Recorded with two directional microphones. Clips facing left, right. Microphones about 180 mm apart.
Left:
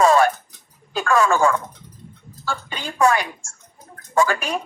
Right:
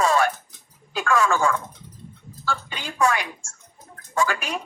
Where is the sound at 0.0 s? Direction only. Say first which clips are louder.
Left 5 dB; 45° left (ahead or behind).